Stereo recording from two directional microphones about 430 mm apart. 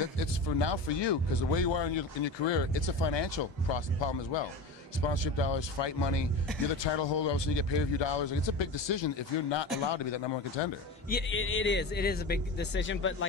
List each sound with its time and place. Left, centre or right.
0.6 s speech: left
5.4 s a man's voice: left
11.1 s a man's voice: left